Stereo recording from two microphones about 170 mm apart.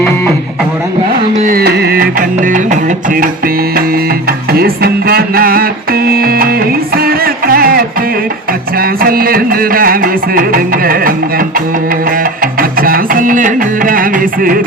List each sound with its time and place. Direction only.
1.4 s music: 55° right (ahead or behind)